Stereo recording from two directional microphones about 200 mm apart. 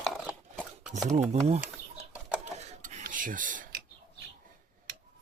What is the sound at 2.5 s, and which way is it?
Filing, 35° right (ahead or behind).